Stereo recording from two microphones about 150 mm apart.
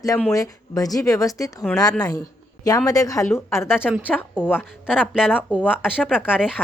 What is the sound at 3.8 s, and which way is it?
A woman's voice, 5° right (ahead or behind).